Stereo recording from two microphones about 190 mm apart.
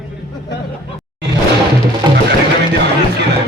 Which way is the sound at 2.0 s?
25° right (ahead or behind).